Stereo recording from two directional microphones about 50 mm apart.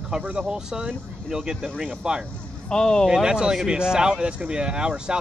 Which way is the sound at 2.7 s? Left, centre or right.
Centre.